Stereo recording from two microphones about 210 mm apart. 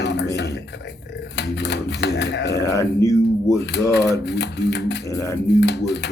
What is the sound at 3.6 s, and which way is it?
Speech, 55° left (ahead or behind).